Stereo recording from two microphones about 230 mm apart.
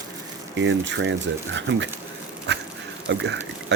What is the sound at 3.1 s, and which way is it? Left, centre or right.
Speech, right.